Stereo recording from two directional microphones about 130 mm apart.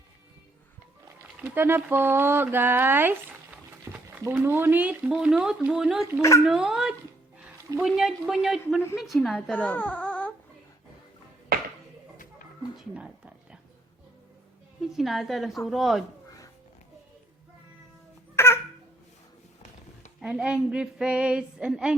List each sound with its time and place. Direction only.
1.4 s a woman's voice: 15° right (ahead or behind); by 9.4 s centre (ahead or behind)
9.5 s speech: 10° left (ahead or behind)
12.7 s a sound: 10° right (ahead or behind)
14.8 s a woman's voice: centre (ahead or behind)
18.3 s babbling: 20° left (ahead or behind)
20.2 s speech: 10° right (ahead or behind)